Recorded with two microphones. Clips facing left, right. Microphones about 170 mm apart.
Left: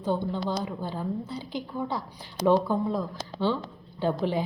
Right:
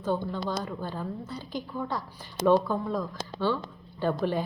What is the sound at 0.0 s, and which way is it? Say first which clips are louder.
A woman's voice: left 1 dB; 15° left (ahead or behind).